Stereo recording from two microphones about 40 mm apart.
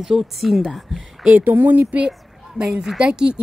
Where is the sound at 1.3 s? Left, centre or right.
Right.